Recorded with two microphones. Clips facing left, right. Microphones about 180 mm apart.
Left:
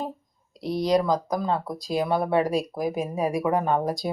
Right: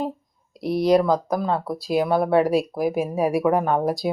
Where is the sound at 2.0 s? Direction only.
55° right (ahead or behind).